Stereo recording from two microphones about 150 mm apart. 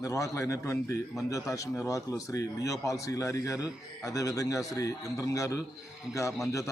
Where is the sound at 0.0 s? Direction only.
20° left (ahead or behind).